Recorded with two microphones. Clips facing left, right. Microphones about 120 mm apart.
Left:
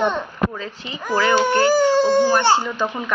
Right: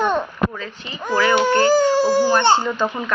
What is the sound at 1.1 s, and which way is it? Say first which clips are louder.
Speech: right 1 dB; 20° left (ahead or behind).